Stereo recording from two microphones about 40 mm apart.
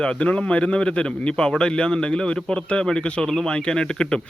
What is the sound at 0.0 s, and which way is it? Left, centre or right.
A man's voice, left.